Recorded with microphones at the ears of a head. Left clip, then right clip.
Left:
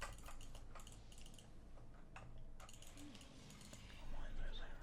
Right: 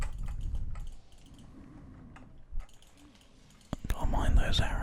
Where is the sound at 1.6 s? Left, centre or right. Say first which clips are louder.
Right 12 dB; right.